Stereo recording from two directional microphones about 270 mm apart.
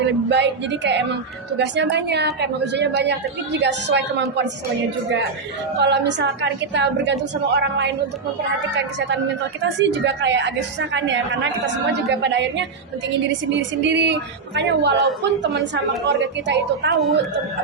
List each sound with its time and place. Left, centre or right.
0.0 s a woman's voice: right
5.8 s a woman's voice: right
12.1 s a woman's voice: right